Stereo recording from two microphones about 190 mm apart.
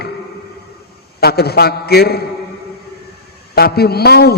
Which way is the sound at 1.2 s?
55° left (ahead or behind).